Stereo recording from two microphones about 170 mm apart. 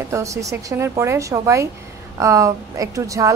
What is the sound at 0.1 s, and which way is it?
A woman's voice, 20° right (ahead or behind).